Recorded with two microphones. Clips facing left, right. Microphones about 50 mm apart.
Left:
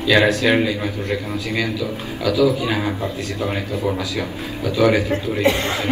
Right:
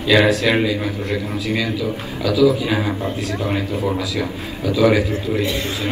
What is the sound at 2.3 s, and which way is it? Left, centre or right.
Speech, left.